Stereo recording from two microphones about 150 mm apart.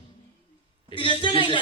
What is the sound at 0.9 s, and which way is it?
Speech, 30° left (ahead or behind).